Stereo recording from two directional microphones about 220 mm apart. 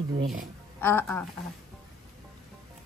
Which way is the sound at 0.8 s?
10° left (ahead or behind).